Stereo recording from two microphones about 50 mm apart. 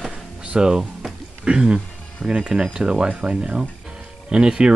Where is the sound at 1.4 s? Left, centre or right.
Centre.